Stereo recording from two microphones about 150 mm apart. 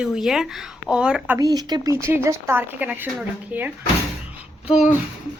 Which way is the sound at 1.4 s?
25° right (ahead or behind).